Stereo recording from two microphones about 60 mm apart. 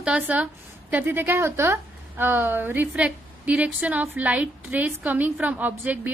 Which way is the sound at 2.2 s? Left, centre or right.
Right.